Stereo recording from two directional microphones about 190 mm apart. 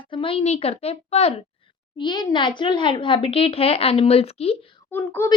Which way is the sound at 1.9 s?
25° left (ahead or behind).